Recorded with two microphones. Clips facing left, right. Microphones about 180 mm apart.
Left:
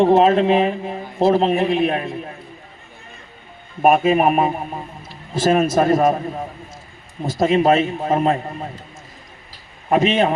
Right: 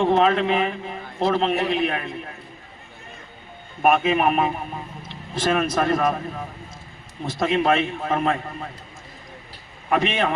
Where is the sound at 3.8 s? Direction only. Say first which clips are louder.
Left 4 dB; 40° left (ahead or behind).